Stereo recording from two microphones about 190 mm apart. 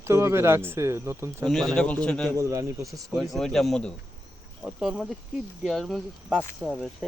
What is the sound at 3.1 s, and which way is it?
Speech, centre (ahead or behind).